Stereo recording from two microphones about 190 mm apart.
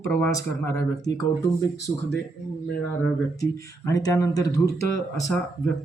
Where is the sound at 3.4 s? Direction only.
15° left (ahead or behind).